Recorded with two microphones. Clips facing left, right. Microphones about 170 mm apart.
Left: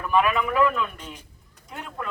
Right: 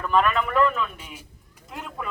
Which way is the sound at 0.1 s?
5° left (ahead or behind).